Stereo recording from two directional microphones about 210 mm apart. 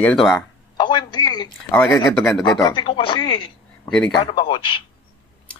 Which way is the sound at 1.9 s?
15° left (ahead or behind).